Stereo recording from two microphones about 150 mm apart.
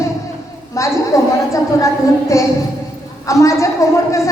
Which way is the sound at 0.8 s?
20° left (ahead or behind).